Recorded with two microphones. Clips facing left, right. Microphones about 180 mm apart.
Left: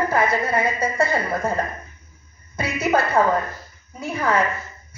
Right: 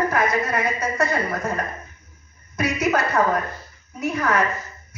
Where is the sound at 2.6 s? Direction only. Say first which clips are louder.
Right 1 dB; 30° left (ahead or behind).